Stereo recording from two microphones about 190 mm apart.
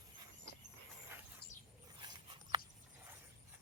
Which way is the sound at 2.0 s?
25° right (ahead or behind).